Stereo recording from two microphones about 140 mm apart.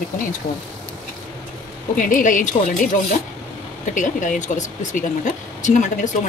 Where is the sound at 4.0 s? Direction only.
65° left (ahead or behind).